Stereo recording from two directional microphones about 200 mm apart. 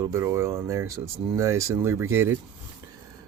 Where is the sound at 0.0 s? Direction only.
15° right (ahead or behind).